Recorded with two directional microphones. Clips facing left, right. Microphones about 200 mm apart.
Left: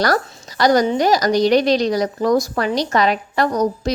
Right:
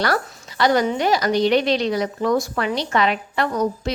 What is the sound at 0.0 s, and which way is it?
A woman's voice, 40° left (ahead or behind).